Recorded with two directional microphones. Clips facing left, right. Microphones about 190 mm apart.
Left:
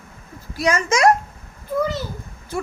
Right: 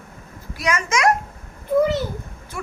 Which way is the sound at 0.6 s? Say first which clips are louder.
Left 3 dB; 30° left (ahead or behind).